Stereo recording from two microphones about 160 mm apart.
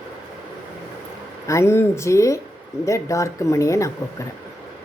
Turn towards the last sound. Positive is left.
turn(degrees=20)  # may be behind; listen again after turning